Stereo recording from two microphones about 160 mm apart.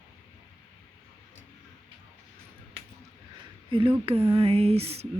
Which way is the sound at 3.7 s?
35° right (ahead or behind).